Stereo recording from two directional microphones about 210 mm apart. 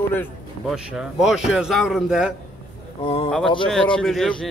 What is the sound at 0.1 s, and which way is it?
Speech, 10° left (ahead or behind).